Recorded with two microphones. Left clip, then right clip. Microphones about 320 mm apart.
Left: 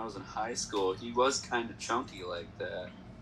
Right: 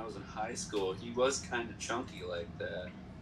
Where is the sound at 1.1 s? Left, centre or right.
Left.